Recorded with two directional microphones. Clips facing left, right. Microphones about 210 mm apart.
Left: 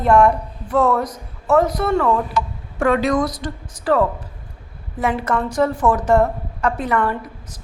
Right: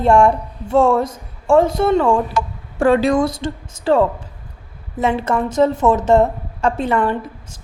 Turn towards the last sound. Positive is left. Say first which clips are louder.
# right 3 dB
turn(degrees=-25)  # may be behind; listen again after turning